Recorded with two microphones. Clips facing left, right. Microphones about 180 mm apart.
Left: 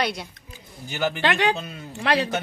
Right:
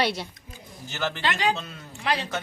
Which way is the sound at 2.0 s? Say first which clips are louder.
Left 5 dB; 65° left (ahead or behind).